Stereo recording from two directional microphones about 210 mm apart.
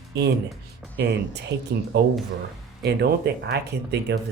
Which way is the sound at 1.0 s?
50° right (ahead or behind).